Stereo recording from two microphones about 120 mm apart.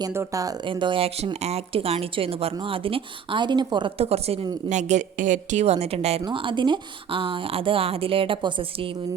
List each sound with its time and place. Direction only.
0.1 s speech: 25° right (ahead or behind)
0.6 s speech: 40° right (ahead or behind)
3.9 s a woman's voice: 55° right (ahead or behind)
4.7 s a woman's voice: 80° right; by 6.2 s 60° right (ahead or behind)
6.2 s speech: 45° right (ahead or behind)